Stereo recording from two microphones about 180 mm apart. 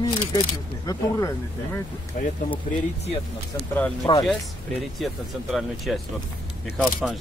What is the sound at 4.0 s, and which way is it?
Speech, 25° left (ahead or behind).